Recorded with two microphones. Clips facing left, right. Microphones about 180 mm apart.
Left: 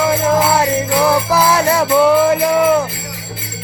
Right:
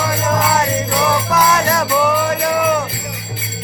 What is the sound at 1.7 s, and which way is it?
Music, 30° left (ahead or behind).